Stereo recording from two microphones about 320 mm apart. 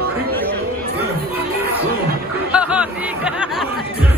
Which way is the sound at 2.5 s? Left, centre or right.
Centre.